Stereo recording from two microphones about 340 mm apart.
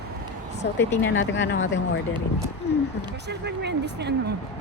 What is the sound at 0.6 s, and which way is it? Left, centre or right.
Speech, left.